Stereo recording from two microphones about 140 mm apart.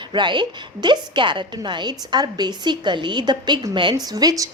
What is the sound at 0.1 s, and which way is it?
A woman's voice, 35° right (ahead or behind).